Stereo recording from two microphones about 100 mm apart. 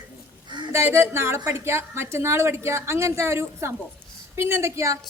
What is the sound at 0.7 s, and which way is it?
A woman's voice, 25° right (ahead or behind).